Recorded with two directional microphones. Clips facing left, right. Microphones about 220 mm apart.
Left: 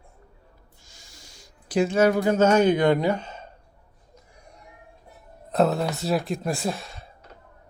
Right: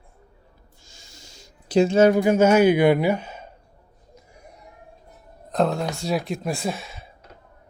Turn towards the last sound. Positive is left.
turn(degrees=0)  # may be behind; listen again after turning